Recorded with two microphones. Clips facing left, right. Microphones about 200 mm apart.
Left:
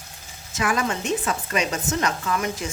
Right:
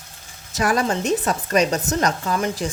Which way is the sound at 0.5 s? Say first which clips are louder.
Right 4 dB; 35° right (ahead or behind).